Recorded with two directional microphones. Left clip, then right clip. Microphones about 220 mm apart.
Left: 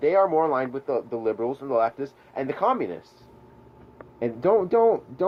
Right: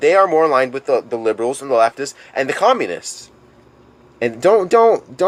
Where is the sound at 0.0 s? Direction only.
15° right (ahead or behind).